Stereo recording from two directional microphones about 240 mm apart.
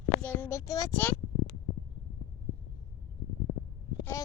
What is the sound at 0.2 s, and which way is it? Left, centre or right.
Speech, centre.